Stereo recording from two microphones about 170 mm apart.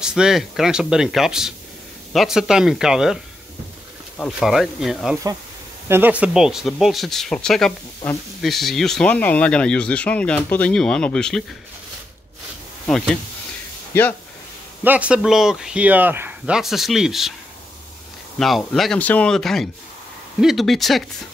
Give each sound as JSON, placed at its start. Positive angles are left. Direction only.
{"t": 0.0, "sound": "a man's voice", "side_deg": -5}
{"t": 4.2, "sound": "a man's voice", "side_deg": 0}
{"t": 12.8, "sound": "a man's voice", "side_deg": 5}
{"t": 13.9, "sound": "speech", "side_deg": 15}
{"t": 14.8, "sound": "a man's voice", "side_deg": -10}
{"t": 18.4, "sound": "a man's voice", "side_deg": 5}